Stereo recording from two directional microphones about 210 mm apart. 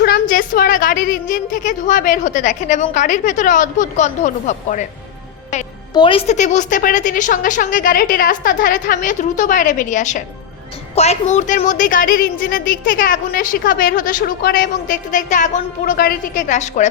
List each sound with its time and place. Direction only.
0.0 s a woman's voice: 45° left (ahead or behind)
5.9 s a woman's voice: 25° left (ahead or behind)